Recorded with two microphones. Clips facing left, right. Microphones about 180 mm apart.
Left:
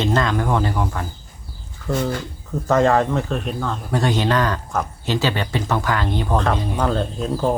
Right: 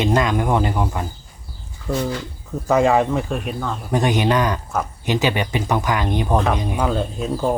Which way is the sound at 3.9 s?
15° right (ahead or behind).